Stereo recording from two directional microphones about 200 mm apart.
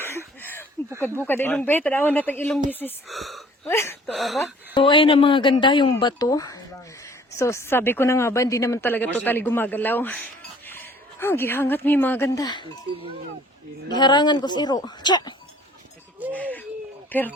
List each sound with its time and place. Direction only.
0.0 s a sound: 10° left (ahead or behind)
1.3 s a woman's voice: 10° left (ahead or behind)
3.7 s a woman's voice: 10° left (ahead or behind)
4.0 s speech: centre (ahead or behind)
4.7 s a woman's voice: 25° left (ahead or behind)
16.3 s a sound: 10° left (ahead or behind)
17.1 s speech: 10° left (ahead or behind)